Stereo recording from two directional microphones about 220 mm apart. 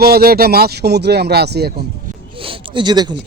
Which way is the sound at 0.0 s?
45° right (ahead or behind).